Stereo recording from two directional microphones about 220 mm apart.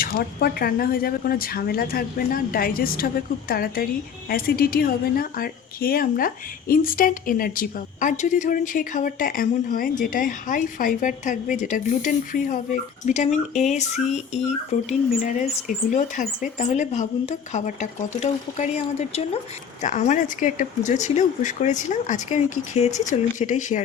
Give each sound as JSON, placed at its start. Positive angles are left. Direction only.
{"t": 0.0, "sound": "a woman's voice", "side_deg": 40}